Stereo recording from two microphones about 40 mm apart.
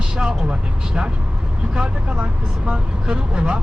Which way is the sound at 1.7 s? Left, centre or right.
Right.